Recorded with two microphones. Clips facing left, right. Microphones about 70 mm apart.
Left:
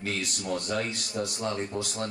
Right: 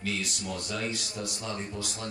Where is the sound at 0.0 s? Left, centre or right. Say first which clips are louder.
Left 1 dB; left.